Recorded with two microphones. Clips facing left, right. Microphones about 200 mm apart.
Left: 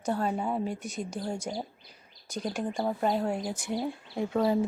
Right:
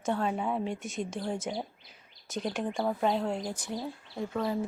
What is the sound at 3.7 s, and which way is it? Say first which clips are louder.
Speech: left 4 dB; 20° left (ahead or behind).